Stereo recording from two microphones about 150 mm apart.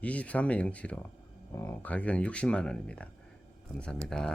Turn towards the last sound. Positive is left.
turn(degrees=5)  # may be behind; listen again after turning